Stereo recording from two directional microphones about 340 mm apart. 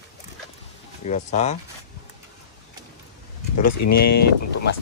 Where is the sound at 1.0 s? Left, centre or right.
Centre.